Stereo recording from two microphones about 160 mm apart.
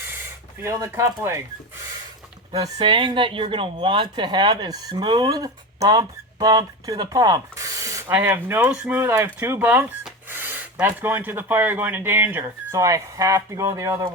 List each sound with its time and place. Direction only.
0.6 s speech: 20° right (ahead or behind)
2.5 s speech: 30° right (ahead or behind)